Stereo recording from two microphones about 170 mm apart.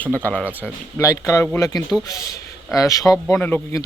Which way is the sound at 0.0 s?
10° left (ahead or behind).